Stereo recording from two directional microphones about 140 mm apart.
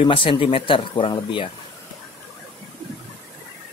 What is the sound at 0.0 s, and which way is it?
Speech, 40° left (ahead or behind).